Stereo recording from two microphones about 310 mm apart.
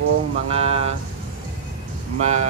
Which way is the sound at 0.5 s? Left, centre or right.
Centre.